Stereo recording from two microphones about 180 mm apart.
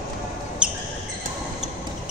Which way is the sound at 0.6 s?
5° right (ahead or behind).